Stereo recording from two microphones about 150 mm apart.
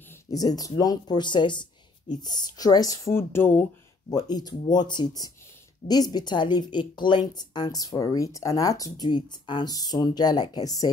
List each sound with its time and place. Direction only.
0.1 s a woman's voice: 25° left (ahead or behind)
4.1 s a woman's voice: 25° left (ahead or behind)